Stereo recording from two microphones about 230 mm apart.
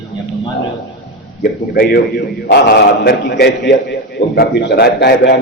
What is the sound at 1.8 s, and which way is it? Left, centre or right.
A man's voice, left.